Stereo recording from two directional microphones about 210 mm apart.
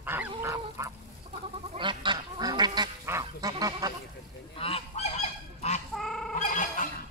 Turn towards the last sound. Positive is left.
turn(degrees=40)  # may be behind; listen again after turning